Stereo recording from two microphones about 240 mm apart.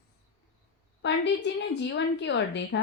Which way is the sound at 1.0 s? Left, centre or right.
Left.